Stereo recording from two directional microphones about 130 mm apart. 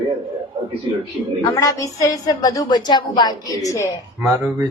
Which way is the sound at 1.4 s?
25° left (ahead or behind).